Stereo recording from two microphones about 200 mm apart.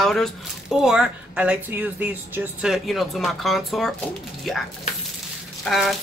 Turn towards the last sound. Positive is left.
turn(degrees=0)  # may be behind; listen again after turning